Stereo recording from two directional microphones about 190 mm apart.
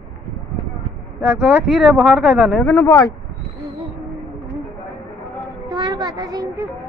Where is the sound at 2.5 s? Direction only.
10° left (ahead or behind).